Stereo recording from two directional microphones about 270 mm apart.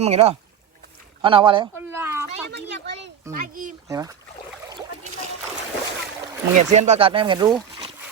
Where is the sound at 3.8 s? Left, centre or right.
Centre.